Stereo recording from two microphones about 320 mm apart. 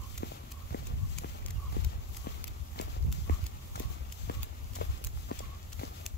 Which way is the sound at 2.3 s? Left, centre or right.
Left.